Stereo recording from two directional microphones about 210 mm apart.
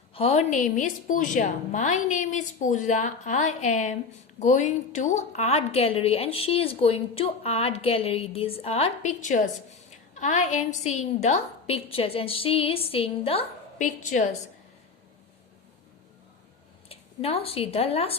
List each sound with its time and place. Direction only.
0.1 s a woman's voice: 30° left (ahead or behind)
16.9 s a woman's voice: 30° left (ahead or behind)